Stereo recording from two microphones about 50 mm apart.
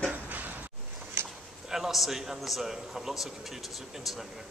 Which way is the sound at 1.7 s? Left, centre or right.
Centre.